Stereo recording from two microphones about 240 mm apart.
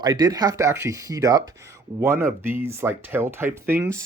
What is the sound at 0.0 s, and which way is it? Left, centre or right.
Speech, centre.